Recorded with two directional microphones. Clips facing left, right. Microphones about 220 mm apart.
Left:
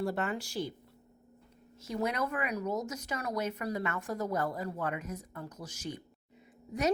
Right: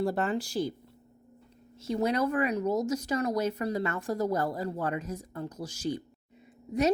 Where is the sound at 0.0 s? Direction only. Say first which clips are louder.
Right 5 dB; 35° right (ahead or behind).